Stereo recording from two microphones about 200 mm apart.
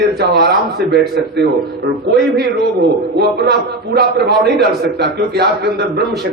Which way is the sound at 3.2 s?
55° right (ahead or behind).